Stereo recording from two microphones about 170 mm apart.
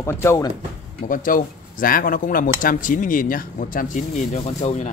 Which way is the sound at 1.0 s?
55° left (ahead or behind).